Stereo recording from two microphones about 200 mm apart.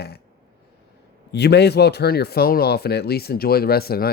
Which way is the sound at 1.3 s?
55° left (ahead or behind).